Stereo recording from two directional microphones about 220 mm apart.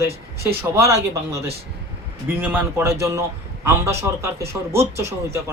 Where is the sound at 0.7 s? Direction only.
15° right (ahead or behind).